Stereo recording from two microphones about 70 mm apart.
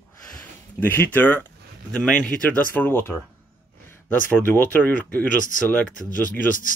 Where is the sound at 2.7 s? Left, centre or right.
Left.